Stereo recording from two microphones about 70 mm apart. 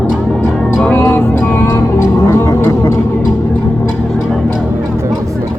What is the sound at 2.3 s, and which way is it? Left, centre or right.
Vehicle, left.